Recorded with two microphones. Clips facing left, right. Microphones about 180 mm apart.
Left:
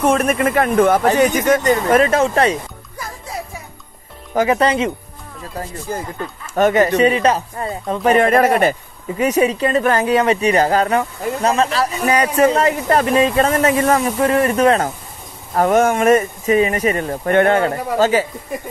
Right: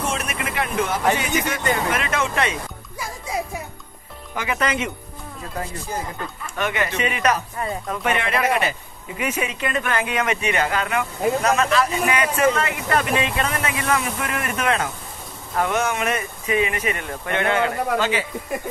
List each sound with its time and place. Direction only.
0.0 s speech: 55° left (ahead or behind)
4.3 s speech: 40° left (ahead or behind)
6.5 s speech: 40° left (ahead or behind)